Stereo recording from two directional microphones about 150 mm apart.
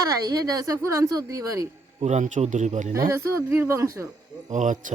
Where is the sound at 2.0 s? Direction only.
50° right (ahead or behind).